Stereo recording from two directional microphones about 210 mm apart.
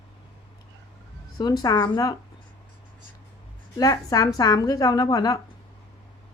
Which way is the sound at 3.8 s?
15° left (ahead or behind).